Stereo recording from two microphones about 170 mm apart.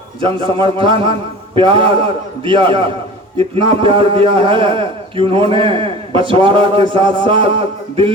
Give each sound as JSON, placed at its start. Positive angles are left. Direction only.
{"t": 0.2, "sound": "a man's voice", "side_deg": -30}